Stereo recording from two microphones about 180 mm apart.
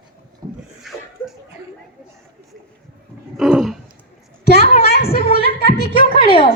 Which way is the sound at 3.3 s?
5° right (ahead or behind).